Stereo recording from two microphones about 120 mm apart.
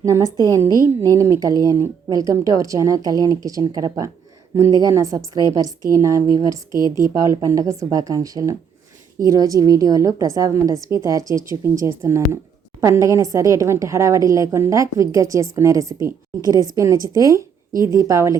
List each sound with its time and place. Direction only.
0.0 s a woman's voice: 30° right (ahead or behind)